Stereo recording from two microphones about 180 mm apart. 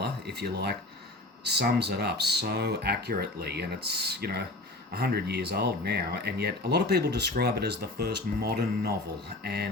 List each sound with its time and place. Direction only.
0.0 s speech: 65° right (ahead or behind)